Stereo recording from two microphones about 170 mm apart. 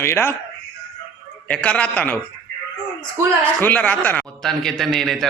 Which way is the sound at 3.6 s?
10° left (ahead or behind).